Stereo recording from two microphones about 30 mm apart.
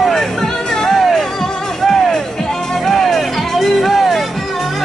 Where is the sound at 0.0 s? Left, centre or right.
Centre.